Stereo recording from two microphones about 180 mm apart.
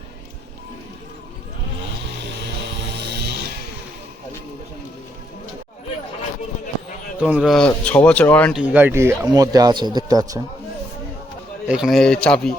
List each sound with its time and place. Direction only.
2.9 s music: 70° right (ahead or behind)
7.2 s speech: 5° right (ahead or behind)
8.6 s a man's voice: 10° right (ahead or behind)
11.7 s speech: centre (ahead or behind)